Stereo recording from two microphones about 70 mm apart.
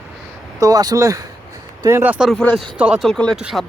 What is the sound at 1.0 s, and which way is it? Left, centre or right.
Speech, right.